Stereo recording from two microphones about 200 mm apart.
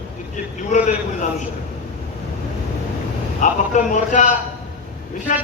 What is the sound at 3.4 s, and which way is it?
Speech, 40° left (ahead or behind).